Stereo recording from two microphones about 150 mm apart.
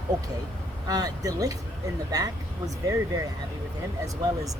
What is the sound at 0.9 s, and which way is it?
Speech, 25° right (ahead or behind).